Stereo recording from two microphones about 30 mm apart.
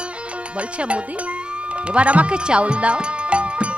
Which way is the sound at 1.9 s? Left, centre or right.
Right.